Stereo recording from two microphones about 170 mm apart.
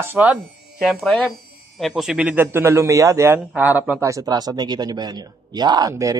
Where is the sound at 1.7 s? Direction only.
Centre (ahead or behind).